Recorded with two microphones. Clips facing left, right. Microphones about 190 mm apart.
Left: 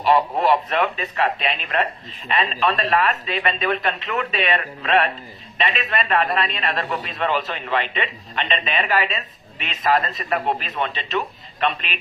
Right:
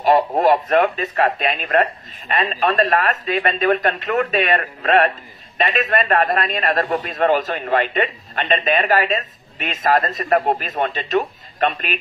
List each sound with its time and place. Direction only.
0.0 s a man's voice: 45° right (ahead or behind)